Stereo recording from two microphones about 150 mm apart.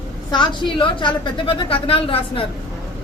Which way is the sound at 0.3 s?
30° left (ahead or behind).